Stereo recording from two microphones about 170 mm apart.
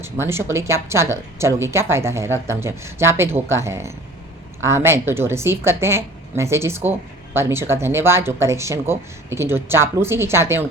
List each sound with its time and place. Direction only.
0.0 s speech: 15° right (ahead or behind)